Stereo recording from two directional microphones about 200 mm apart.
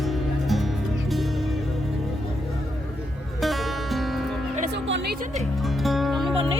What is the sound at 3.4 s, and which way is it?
Music, centre (ahead or behind).